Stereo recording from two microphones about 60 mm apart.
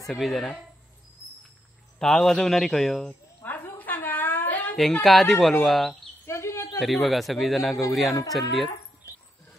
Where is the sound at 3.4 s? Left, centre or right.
Left.